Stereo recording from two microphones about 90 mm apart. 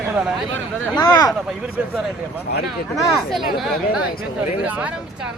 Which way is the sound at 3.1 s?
Centre (ahead or behind).